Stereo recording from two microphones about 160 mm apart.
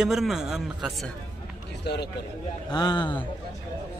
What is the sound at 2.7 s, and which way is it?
Speech, 25° left (ahead or behind).